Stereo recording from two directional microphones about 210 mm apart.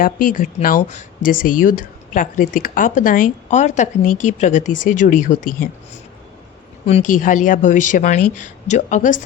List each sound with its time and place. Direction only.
0.0 s speech: 40° left (ahead or behind)
6.8 s speech: 35° left (ahead or behind)